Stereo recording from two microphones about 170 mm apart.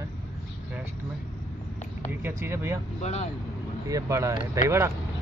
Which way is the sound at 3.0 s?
40° left (ahead or behind).